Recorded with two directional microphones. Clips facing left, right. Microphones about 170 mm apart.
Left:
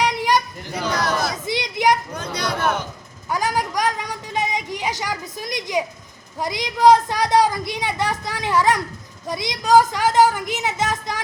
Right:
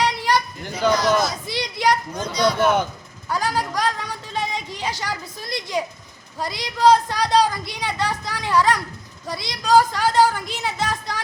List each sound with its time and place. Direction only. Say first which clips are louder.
0.0 s children playing: left 1 dB; 15° left (ahead or behind)
0.7 s chatter: right 4 dB; 65° left (ahead or behind)
1.5 s a sound: left 2 dB; 20° left (ahead or behind)
2.1 s chatter: right 5 dB; 65° left (ahead or behind)
3.2 s a woman's voice: left 1 dB; 15° left (ahead or behind)